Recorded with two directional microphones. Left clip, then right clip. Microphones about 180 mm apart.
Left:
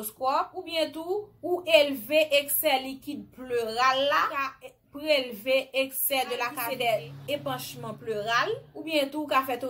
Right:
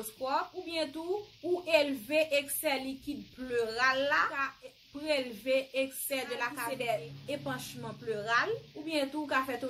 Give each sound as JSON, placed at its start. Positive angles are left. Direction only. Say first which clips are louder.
{"t": 0.0, "sound": "a woman's voice", "louder": "left 6 dB", "side_deg": 0}
{"t": 8.1, "sound": "speech", "louder": "left 4 dB", "side_deg": -15}
{"t": 8.9, "sound": "a woman's voice", "louder": "left 6 dB", "side_deg": 0}